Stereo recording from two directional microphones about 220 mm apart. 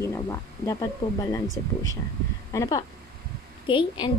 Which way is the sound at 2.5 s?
15° left (ahead or behind).